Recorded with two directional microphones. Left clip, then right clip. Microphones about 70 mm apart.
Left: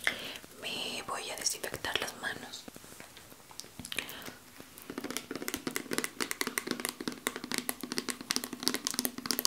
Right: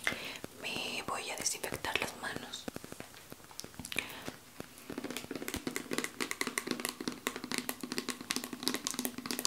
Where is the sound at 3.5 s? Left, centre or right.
Centre.